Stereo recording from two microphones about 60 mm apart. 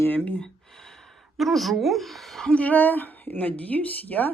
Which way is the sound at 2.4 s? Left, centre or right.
Left.